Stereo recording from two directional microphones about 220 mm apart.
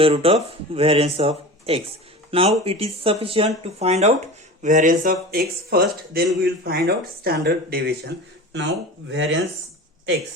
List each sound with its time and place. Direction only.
0.0 s speech: 25° right (ahead or behind); by 8.1 s 45° right (ahead or behind)
9.0 s speech: 55° right (ahead or behind)